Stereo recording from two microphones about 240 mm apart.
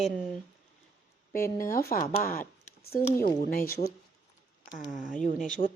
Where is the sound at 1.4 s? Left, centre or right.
Centre.